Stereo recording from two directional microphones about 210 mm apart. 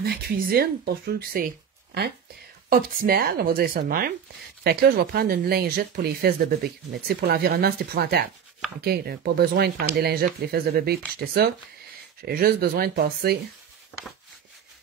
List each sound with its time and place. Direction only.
0.0 s speech: 45° right (ahead or behind)
2.7 s speech: 45° right (ahead or behind)
12.3 s speech: 45° right (ahead or behind)
13.9 s a sound: 5° right (ahead or behind)